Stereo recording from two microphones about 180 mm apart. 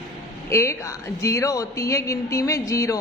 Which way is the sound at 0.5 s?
15° left (ahead or behind).